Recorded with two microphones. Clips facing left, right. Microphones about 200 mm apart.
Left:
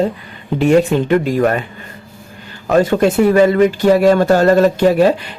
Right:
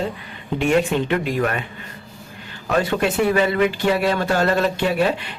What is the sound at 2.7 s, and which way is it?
Speech, 40° left (ahead or behind).